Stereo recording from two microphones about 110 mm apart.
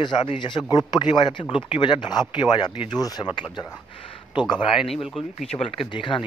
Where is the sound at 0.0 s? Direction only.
45° left (ahead or behind).